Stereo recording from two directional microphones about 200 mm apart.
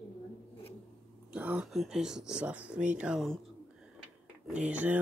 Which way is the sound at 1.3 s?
5° right (ahead or behind).